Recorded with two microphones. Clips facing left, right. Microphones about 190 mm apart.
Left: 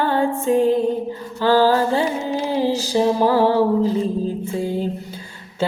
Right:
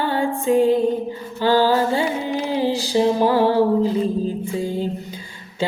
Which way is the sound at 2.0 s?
30° left (ahead or behind).